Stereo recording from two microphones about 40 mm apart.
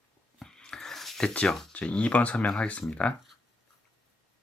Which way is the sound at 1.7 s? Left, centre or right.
Left.